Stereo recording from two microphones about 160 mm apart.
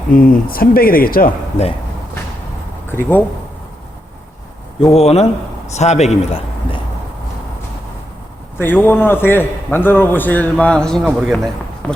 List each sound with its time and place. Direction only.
0.1 s speech: 60° left (ahead or behind)
2.8 s speech: 15° left (ahead or behind)
4.8 s speech: 40° left (ahead or behind)
8.5 s a man's voice: 10° left (ahead or behind)